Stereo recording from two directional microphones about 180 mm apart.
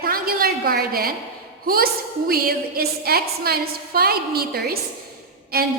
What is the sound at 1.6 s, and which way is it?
A woman's voice, 55° right (ahead or behind).